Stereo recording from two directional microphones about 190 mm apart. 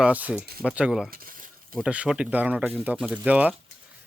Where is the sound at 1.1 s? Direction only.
50° right (ahead or behind).